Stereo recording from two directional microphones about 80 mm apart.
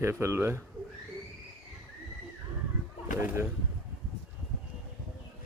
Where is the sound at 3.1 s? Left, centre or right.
Right.